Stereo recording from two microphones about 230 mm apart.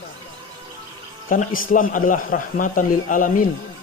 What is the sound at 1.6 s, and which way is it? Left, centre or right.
A man's voice, left.